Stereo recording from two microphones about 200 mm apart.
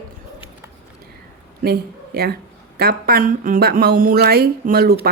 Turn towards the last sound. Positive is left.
turn(degrees=-50)  # may be behind; listen again after turning